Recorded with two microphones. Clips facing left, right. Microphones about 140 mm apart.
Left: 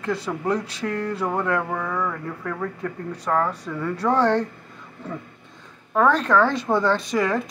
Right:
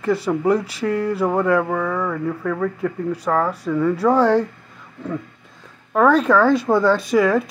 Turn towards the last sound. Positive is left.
turn(degrees=-5)  # may be behind; listen again after turning